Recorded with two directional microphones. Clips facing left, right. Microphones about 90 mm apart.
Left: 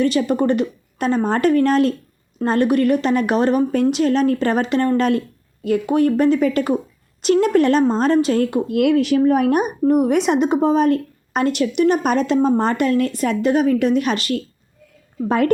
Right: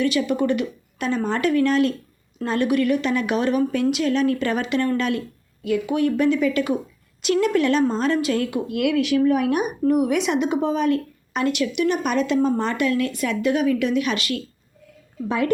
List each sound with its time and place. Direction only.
0.0 s speech: 40° left (ahead or behind)